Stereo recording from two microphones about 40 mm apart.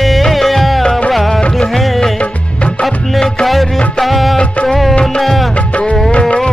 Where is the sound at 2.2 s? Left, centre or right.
Left.